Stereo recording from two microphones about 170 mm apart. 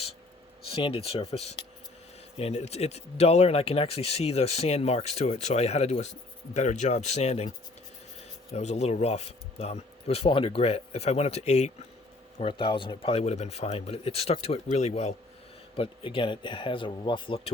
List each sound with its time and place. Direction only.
0.7 s speech: 35° left (ahead or behind)
8.5 s speech: 40° left (ahead or behind)